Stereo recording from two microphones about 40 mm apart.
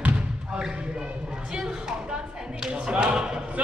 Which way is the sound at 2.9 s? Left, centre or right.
Right.